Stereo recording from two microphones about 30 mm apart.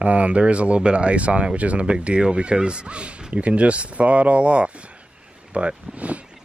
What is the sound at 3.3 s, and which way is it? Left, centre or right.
Speech, right.